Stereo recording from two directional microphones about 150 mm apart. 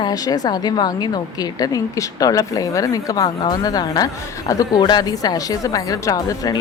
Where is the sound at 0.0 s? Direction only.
25° left (ahead or behind).